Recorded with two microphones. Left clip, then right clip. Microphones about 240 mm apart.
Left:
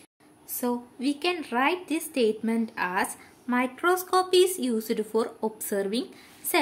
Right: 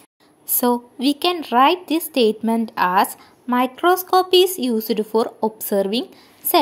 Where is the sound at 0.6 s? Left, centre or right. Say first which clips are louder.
Right 10 dB; right.